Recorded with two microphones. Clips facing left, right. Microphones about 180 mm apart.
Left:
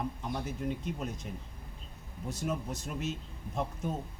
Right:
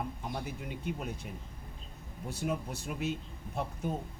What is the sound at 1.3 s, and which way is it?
Speech, 5° right (ahead or behind).